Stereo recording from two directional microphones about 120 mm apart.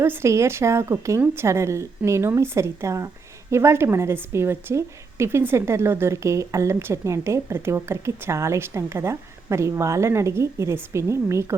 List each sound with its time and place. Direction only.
0.0 s a woman's voice: 20° right (ahead or behind)